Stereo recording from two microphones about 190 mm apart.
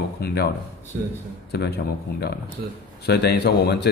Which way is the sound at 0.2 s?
55° left (ahead or behind).